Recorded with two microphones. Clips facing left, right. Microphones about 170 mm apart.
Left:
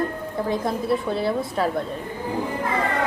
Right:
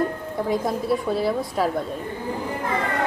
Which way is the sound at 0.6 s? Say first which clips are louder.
Even; centre (ahead or behind).